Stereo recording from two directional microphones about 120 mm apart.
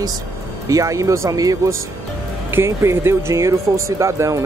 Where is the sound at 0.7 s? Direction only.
25° right (ahead or behind).